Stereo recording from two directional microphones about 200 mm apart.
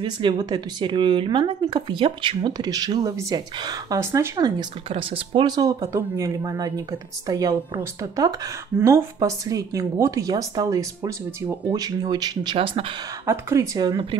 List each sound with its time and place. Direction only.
0.0 s speech: 25° right (ahead or behind)
13.3 s speech: 15° right (ahead or behind)